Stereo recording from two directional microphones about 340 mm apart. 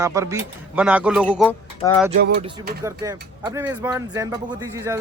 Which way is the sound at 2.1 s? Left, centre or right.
Right.